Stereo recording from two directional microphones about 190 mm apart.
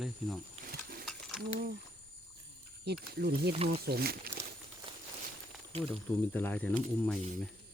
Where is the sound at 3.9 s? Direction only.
55° right (ahead or behind).